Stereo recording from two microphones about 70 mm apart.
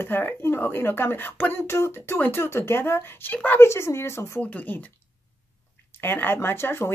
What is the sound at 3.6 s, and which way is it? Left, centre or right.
Speech, left.